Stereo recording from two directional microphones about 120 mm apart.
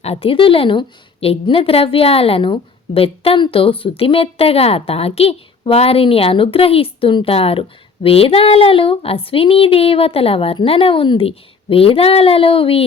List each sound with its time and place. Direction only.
0.0 s a woman's voice: 55° left (ahead or behind)